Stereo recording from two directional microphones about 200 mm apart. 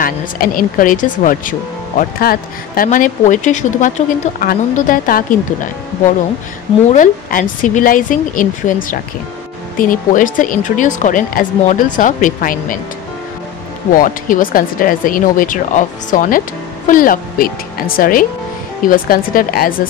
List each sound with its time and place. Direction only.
0.0 s a woman's voice: 45° left (ahead or behind)
6.9 s a woman's voice: 40° left (ahead or behind)
13.9 s speech: 45° left (ahead or behind)